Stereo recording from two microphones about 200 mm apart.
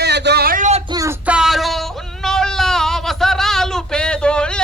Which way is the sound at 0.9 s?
20° right (ahead or behind).